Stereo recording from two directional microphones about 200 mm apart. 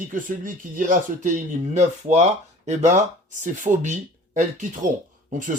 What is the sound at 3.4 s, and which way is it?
Speech, 40° right (ahead or behind).